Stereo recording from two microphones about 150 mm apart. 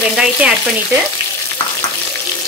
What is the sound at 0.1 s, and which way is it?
Speech, 5° right (ahead or behind).